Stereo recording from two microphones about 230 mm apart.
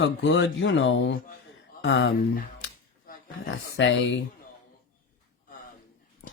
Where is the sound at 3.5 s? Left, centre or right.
Left.